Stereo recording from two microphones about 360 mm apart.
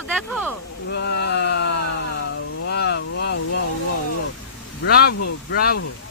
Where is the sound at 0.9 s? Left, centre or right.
Left.